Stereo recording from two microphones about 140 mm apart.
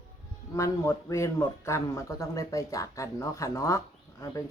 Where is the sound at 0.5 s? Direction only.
20° left (ahead or behind).